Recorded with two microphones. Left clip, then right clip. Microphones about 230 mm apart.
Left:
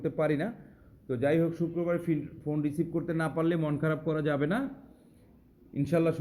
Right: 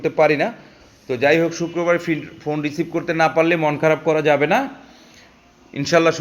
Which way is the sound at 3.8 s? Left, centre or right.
Right.